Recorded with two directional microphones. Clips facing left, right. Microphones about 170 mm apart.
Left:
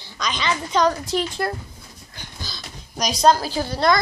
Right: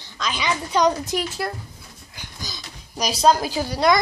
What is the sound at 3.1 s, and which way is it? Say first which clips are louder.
Child singing: left 1 dB; 5° right (ahead or behind).